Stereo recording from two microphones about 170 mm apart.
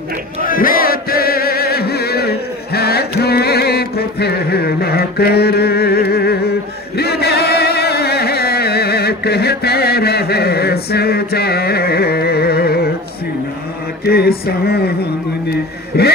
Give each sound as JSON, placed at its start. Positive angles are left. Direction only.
{"t": 0.4, "sound": "chant", "side_deg": 55}
{"t": 14.0, "sound": "a sound", "side_deg": 65}
{"t": 15.9, "sound": "vehicle", "side_deg": 75}